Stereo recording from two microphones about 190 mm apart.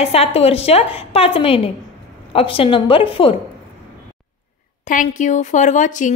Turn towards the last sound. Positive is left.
turn(degrees=40)  # may be behind; listen again after turning